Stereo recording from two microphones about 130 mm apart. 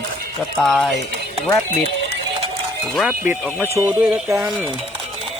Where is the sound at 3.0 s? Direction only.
10° right (ahead or behind).